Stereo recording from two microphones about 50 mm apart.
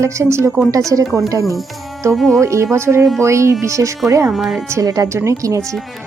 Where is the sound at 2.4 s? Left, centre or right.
Right.